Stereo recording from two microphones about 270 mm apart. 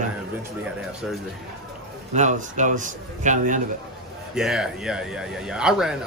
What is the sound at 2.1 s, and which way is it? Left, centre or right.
A man's voice, right.